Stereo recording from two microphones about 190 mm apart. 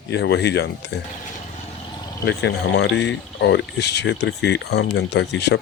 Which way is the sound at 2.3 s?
70° left (ahead or behind).